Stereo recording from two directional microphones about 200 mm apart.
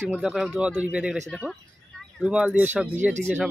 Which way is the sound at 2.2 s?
5° right (ahead or behind).